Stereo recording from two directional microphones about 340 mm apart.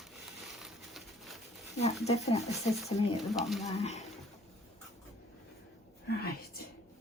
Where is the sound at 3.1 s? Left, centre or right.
Centre.